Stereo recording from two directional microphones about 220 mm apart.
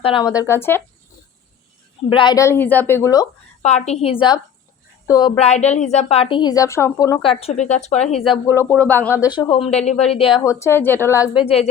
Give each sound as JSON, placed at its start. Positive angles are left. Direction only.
{"t": 0.0, "sound": "a woman's voice", "side_deg": 20}
{"t": 2.0, "sound": "a woman's voice", "side_deg": 20}
{"t": 3.6, "sound": "a woman's voice", "side_deg": 30}
{"t": 5.4, "sound": "a woman's voice", "side_deg": 30}
{"t": 8.4, "sound": "a woman's voice", "side_deg": 10}
{"t": 9.3, "sound": "a woman's voice", "side_deg": 20}
{"t": 11.4, "sound": "a woman's voice", "side_deg": 25}